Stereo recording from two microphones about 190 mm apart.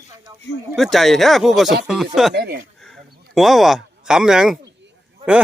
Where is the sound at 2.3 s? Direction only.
55° right (ahead or behind).